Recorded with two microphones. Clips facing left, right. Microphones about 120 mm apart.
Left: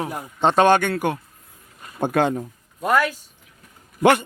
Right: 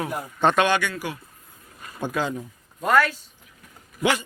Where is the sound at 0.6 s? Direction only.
50° left (ahead or behind).